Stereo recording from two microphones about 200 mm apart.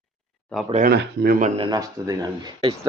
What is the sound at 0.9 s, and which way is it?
Speech, 45° right (ahead or behind).